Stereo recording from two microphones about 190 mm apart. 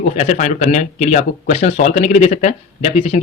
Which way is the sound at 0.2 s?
35° left (ahead or behind).